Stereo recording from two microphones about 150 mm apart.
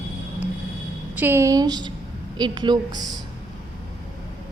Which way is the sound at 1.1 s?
15° right (ahead or behind).